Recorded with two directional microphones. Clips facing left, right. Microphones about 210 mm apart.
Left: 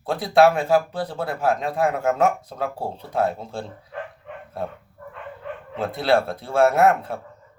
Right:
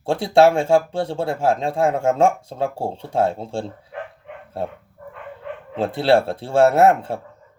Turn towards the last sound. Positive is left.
turn(degrees=-30)  # may be behind; listen again after turning